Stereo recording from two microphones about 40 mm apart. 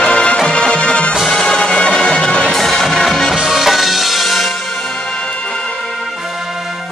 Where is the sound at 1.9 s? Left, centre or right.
Centre.